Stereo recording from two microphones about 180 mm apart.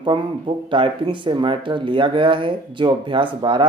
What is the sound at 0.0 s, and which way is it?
Speech, 30° right (ahead or behind).